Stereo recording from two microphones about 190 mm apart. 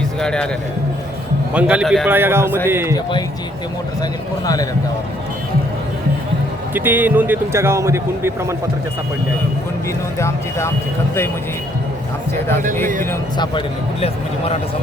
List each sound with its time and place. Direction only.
0.2 s music: 5° left (ahead or behind)
1.5 s speech: 5° right (ahead or behind)
6.7 s speech: 10° right (ahead or behind)
10.2 s speech: 15° left (ahead or behind)
13.3 s speech: 25° left (ahead or behind)